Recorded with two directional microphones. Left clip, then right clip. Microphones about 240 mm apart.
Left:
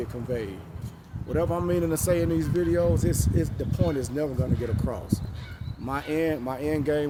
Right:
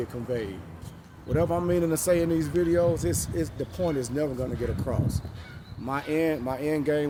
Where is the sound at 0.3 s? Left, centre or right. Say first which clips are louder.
Even; centre.